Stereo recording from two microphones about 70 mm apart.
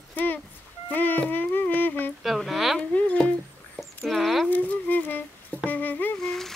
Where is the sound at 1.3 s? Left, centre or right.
Left.